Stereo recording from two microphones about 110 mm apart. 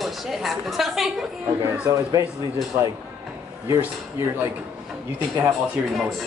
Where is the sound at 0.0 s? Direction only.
Centre (ahead or behind).